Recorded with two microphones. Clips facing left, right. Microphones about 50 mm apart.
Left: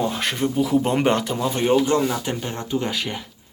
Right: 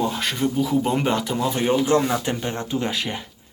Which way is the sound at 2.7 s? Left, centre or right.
Centre.